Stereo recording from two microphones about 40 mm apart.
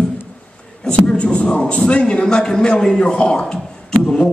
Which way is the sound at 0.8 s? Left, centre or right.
Left.